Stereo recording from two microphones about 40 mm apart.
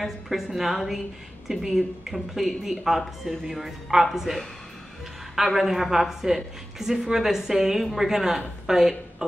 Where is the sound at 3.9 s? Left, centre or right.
Centre.